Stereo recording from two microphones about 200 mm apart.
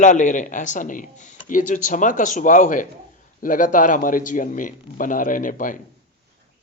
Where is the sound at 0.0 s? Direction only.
40° left (ahead or behind).